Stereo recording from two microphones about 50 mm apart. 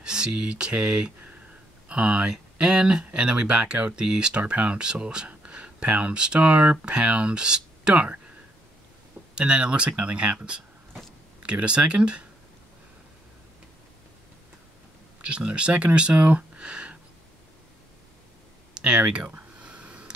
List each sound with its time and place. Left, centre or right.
0.0 s speech: centre
9.3 s speech: right
15.2 s speech: centre
18.8 s speech: right
19.6 s a sound: right